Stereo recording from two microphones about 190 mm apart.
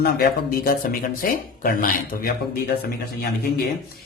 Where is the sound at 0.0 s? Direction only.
55° left (ahead or behind).